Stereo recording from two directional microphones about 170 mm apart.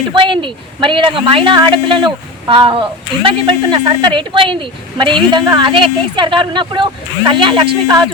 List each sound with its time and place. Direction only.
0.1 s a woman's voice: 30° right (ahead or behind)